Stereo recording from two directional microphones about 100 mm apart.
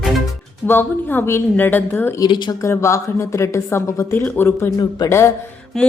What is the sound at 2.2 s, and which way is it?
Speech, 45° left (ahead or behind).